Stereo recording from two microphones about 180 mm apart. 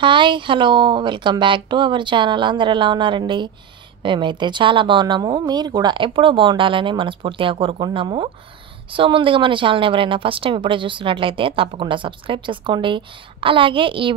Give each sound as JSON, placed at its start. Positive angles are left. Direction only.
{"t": 0.0, "sound": "a woman's voice", "side_deg": -25}